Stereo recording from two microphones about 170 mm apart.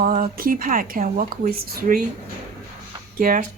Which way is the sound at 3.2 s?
55° right (ahead or behind).